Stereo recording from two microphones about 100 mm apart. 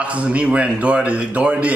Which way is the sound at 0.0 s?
15° right (ahead or behind).